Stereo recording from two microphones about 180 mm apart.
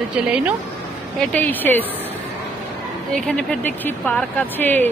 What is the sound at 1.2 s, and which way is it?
Speech, 10° left (ahead or behind).